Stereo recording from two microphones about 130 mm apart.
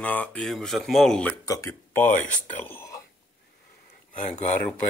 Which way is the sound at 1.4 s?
25° left (ahead or behind).